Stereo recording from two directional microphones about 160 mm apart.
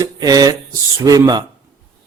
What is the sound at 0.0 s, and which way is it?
A man's voice, 25° right (ahead or behind).